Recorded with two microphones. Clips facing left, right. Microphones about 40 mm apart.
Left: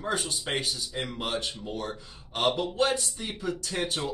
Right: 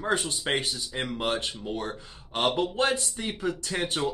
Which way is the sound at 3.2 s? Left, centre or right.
Right.